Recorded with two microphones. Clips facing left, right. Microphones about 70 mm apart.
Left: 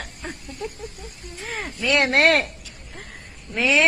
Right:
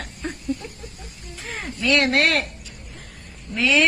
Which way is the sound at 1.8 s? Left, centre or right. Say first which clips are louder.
Right 1 dB; left.